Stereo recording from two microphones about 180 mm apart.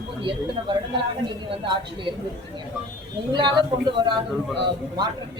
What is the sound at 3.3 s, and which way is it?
A man's voice, 25° right (ahead or behind).